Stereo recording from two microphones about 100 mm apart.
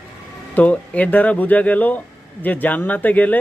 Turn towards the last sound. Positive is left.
turn(degrees=15)  # may be behind; listen again after turning